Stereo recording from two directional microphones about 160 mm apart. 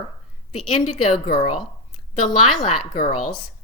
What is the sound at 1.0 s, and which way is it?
Speech, 35° left (ahead or behind).